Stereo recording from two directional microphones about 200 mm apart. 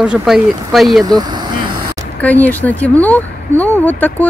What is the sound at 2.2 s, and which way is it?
Speech, 10° left (ahead or behind).